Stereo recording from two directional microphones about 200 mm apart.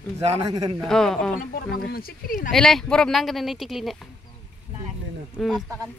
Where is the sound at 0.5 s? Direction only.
20° right (ahead or behind).